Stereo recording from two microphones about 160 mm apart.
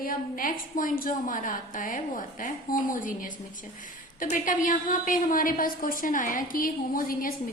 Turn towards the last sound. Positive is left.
turn(degrees=60)  # may be behind; listen again after turning